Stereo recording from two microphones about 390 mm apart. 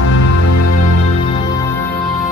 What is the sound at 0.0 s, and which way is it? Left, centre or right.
Music, left.